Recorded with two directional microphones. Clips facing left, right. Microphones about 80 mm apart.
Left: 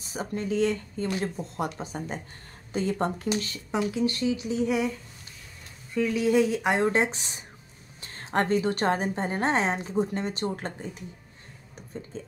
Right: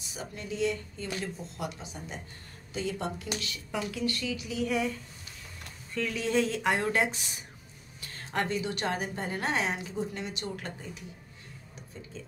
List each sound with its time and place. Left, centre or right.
0.0 s a woman's voice: left
3.7 s speech: left
4.6 s speech: centre
5.9 s a woman's voice: centre; by 11.1 s left